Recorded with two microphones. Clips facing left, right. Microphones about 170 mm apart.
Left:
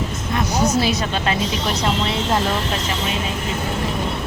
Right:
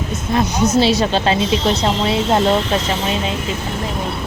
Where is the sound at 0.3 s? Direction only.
25° right (ahead or behind).